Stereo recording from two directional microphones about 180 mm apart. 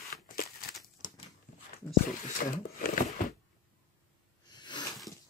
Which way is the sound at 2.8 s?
45° left (ahead or behind).